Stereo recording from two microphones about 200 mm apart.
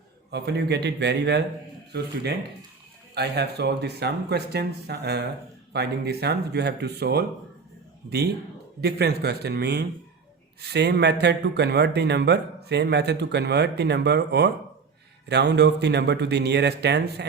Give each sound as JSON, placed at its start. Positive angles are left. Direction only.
{"t": 0.3, "sound": "speech", "side_deg": -55}
{"t": 8.8, "sound": "a man's voice", "side_deg": -55}